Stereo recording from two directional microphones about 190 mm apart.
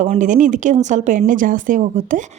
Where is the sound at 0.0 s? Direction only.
40° right (ahead or behind).